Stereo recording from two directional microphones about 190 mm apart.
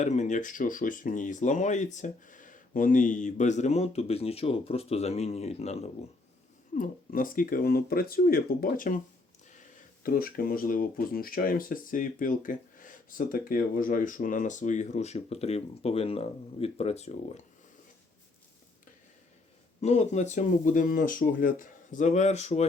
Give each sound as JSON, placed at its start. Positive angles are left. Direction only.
{"t": 0.0, "sound": "speech", "side_deg": 40}
{"t": 6.7, "sound": "speech", "side_deg": 45}
{"t": 19.8, "sound": "speech", "side_deg": 35}